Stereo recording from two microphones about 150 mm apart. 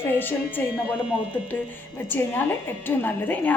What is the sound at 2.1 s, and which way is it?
A woman's voice, 15° left (ahead or behind).